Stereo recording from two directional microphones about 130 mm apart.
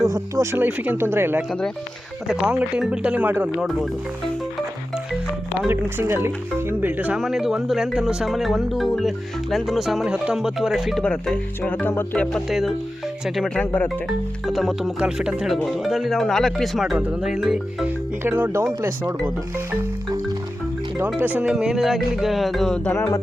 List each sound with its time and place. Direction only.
0.0 s speech: 25° right (ahead or behind)
0.6 s speech: 15° right (ahead or behind)
1.5 s speech: 5° left (ahead or behind)
2.2 s speech: 5° right (ahead or behind)
5.6 s speech: 20° right (ahead or behind); by 13.9 s 10° left (ahead or behind)
14.4 s speech: centre (ahead or behind)
18.2 s speech: 15° right (ahead or behind)
21.2 s speech: 10° right (ahead or behind); by 23.2 s 15° left (ahead or behind)